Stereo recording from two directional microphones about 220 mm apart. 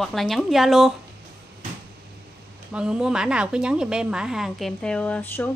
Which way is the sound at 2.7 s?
5° right (ahead or behind).